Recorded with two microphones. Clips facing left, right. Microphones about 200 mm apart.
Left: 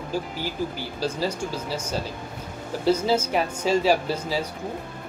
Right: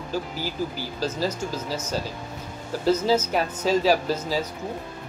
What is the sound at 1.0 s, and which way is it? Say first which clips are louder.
Speech: even; 10° left (ahead or behind).